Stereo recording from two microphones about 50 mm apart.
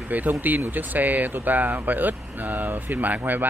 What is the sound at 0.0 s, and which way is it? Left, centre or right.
Speech, right.